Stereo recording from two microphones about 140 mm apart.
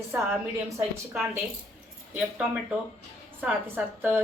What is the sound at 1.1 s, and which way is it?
Speech, 10° right (ahead or behind).